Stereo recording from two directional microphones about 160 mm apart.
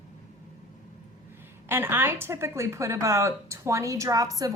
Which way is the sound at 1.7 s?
15° right (ahead or behind).